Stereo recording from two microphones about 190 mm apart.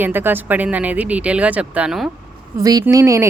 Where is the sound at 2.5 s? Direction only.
20° right (ahead or behind).